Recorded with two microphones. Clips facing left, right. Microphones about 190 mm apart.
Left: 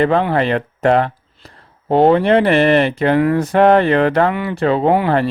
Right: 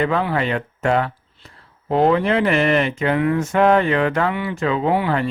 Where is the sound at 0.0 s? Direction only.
35° left (ahead or behind).